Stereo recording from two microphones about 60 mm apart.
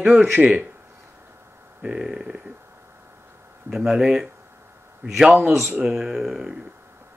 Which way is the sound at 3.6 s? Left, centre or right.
Centre.